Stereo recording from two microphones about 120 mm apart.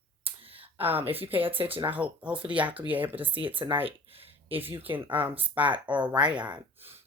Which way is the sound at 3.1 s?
50° right (ahead or behind).